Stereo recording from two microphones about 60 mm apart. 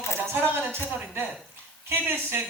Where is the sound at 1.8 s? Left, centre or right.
Right.